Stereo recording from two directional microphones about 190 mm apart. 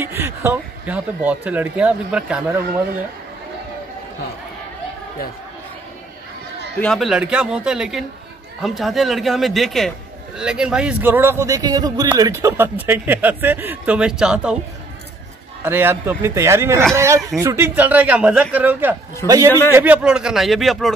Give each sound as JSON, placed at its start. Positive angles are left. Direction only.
{"t": 0.0, "sound": "a man's voice", "side_deg": -15}
{"t": 6.8, "sound": "a man's voice", "side_deg": 0}
{"t": 15.6, "sound": "a man's voice", "side_deg": -10}
{"t": 19.7, "sound": "speech", "side_deg": -10}